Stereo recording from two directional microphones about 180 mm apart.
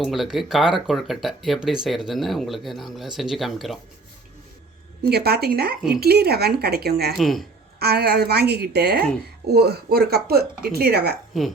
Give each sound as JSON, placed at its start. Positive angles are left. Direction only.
{"t": 0.0, "sound": "speech", "side_deg": 0}
{"t": 5.0, "sound": "speech", "side_deg": -60}
{"t": 7.2, "sound": "speech", "side_deg": 0}
{"t": 7.8, "sound": "speech", "side_deg": -60}